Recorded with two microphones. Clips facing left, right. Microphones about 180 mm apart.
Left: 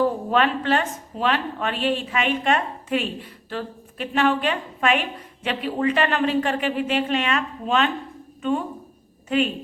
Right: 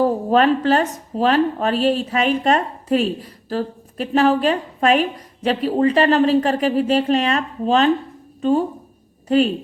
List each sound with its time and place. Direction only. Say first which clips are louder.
0.3 s a woman's voice: right 6 dB; 40° right (ahead or behind)